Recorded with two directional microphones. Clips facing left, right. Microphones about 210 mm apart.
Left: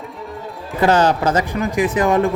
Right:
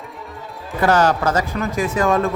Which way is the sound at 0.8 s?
20° left (ahead or behind).